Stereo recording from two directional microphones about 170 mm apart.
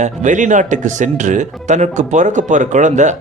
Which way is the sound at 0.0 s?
45° right (ahead or behind).